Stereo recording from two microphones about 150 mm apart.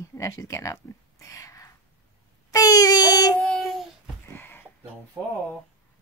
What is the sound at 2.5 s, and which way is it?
Child singing, 25° left (ahead or behind).